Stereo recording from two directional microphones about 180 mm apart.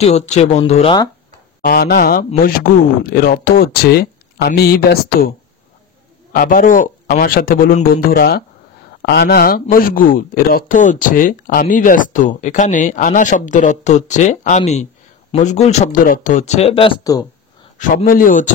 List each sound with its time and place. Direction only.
0.0 s speech: 35° left (ahead or behind)
1.6 s speech: 55° left (ahead or behind)
6.3 s a man's voice: 50° left (ahead or behind); by 17.3 s 20° left (ahead or behind)
17.7 s a man's voice: 50° left (ahead or behind)